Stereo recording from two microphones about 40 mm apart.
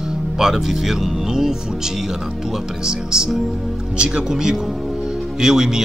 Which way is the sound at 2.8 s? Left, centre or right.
Centre.